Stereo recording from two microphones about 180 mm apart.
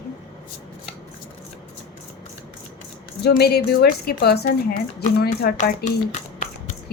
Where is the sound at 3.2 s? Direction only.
60° left (ahead or behind).